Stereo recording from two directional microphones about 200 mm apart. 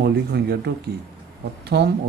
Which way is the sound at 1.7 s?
55° right (ahead or behind).